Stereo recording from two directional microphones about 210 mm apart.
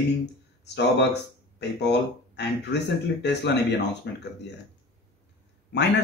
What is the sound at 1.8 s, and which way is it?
Speech, 55° left (ahead or behind).